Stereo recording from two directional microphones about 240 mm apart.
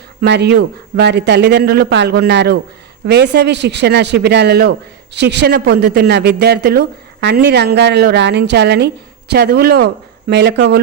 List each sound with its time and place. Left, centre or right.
0.2 s a woman's voice: right